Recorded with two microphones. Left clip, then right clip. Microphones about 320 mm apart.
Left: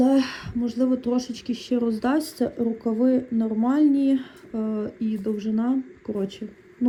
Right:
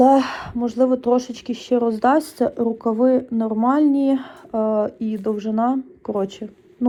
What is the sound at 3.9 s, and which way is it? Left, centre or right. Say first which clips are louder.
Speech: right 3 dB; centre.